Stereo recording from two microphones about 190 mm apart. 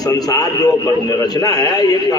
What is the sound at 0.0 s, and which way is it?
A man's voice, 20° left (ahead or behind).